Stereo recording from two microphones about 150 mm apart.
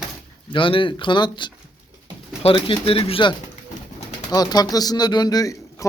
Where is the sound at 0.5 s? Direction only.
35° left (ahead or behind).